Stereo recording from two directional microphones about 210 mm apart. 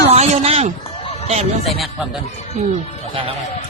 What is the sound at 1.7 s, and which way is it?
Speech, centre (ahead or behind).